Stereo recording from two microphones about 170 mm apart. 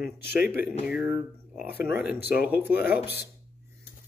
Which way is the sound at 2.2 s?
70° left (ahead or behind).